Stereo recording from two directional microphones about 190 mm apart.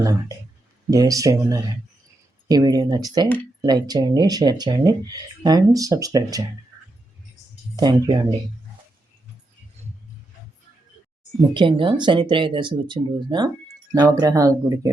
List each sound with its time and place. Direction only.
0.0 s speech: 15° right (ahead or behind)
7.8 s speech: 20° right (ahead or behind)
11.5 s speech: 25° right (ahead or behind)